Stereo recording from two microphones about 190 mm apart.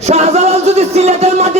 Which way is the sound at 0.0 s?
35° right (ahead or behind).